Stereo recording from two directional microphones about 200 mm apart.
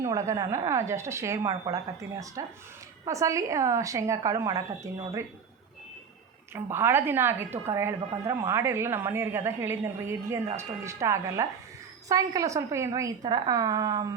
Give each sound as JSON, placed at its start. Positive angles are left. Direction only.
{"t": 0.0, "sound": "a woman's voice", "side_deg": -15}
{"t": 6.5, "sound": "a woman's voice", "side_deg": -10}